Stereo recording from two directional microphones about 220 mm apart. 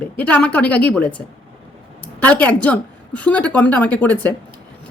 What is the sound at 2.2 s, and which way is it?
A woman's voice, 5° left (ahead or behind).